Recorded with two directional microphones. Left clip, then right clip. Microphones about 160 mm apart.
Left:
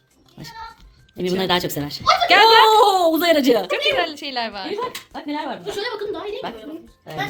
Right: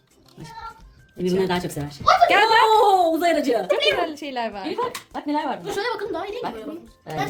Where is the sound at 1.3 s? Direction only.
65° left (ahead or behind).